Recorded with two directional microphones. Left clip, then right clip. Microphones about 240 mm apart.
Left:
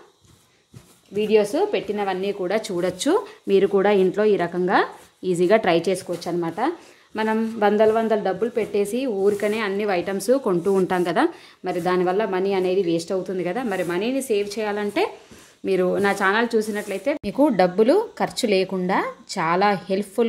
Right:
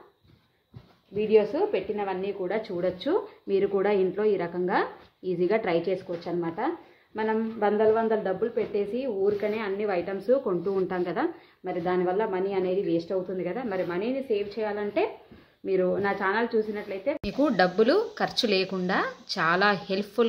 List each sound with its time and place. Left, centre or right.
1.1 s speech: left
17.2 s a woman's voice: centre